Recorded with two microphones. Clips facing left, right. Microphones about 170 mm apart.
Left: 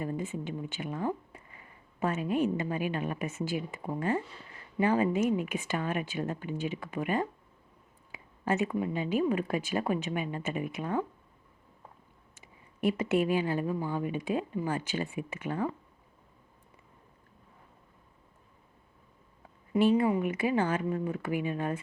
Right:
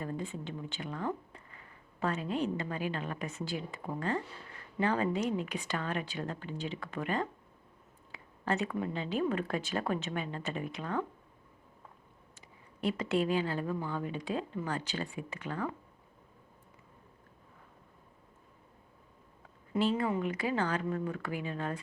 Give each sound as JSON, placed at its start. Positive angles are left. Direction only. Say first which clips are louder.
{"t": 0.0, "sound": "a woman's voice", "louder": "left 4 dB", "side_deg": 15}
{"t": 12.4, "sound": "speech", "louder": "left 5 dB", "side_deg": 20}
{"t": 19.7, "sound": "speech", "louder": "left 5 dB", "side_deg": 15}